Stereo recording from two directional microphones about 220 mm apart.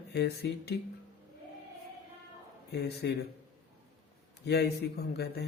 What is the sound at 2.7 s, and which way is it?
Speech, 50° left (ahead or behind).